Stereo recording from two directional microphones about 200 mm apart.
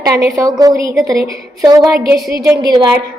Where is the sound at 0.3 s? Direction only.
15° right (ahead or behind).